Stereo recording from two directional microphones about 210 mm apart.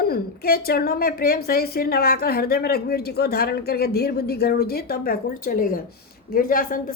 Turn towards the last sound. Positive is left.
turn(degrees=40)  # may be behind; listen again after turning